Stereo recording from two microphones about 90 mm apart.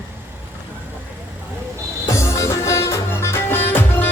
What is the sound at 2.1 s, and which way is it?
Music, 35° left (ahead or behind).